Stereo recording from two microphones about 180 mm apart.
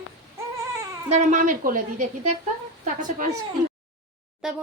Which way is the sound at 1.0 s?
40° right (ahead or behind).